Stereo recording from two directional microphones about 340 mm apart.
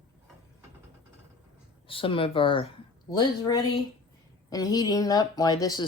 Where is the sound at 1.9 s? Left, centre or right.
Centre.